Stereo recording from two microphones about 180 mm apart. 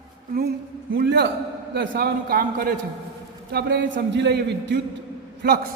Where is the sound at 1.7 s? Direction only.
60° right (ahead or behind).